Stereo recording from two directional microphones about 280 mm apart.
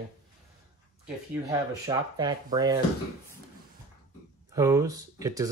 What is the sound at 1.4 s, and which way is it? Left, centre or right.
Speech, centre.